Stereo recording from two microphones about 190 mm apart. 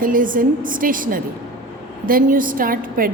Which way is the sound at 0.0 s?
45° right (ahead or behind).